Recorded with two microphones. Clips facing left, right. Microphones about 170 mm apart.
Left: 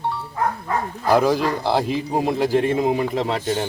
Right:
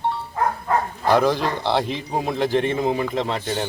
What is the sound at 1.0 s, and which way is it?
A man's voice, 5° left (ahead or behind).